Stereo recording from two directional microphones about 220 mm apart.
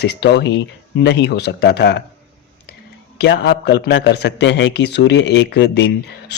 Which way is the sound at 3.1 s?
50° left (ahead or behind).